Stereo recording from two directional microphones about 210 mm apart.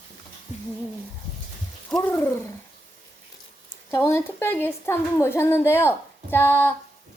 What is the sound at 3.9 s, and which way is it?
A woman's voice, 10° left (ahead or behind).